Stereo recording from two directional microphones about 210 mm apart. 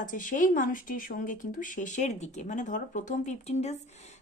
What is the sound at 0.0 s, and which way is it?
Speech, 40° left (ahead or behind).